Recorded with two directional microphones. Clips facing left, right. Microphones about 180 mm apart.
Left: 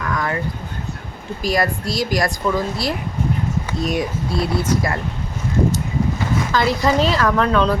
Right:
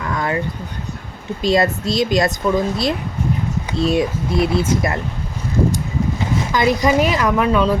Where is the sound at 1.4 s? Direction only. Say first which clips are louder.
Right 4 dB; 25° right (ahead or behind).